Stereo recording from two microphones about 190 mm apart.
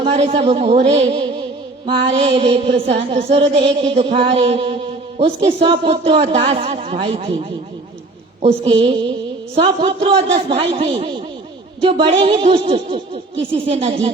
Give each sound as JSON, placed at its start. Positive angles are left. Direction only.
{"t": 0.0, "sound": "speech", "side_deg": -30}